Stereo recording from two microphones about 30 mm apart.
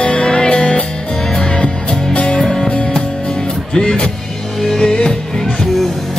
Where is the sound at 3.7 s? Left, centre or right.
Left.